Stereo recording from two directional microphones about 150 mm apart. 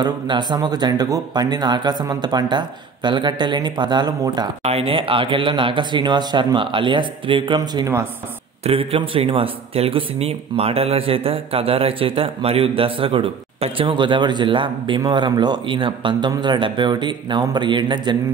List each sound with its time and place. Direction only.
0.0 s speech: 30° right (ahead or behind)
4.6 s speech: 40° right (ahead or behind)
8.6 s speech: 40° right (ahead or behind)